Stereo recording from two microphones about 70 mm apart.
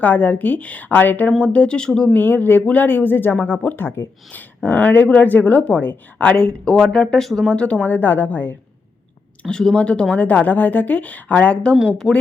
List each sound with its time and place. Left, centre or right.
0.0 s speech: left
1.4 s speech: centre
2.1 s speech: left
9.4 s speech: centre